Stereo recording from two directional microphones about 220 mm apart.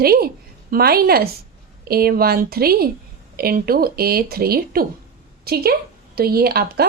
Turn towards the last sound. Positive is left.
turn(degrees=-45)  # may be behind; listen again after turning